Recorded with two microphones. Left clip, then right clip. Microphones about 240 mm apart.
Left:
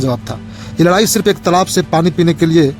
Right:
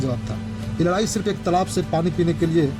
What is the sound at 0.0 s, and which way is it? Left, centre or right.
Speech, left.